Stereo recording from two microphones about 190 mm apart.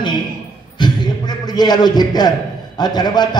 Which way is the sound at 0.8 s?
20° left (ahead or behind).